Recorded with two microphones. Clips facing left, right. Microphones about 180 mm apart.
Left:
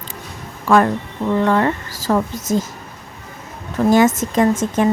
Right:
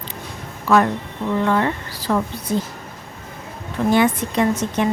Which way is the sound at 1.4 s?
45° left (ahead or behind).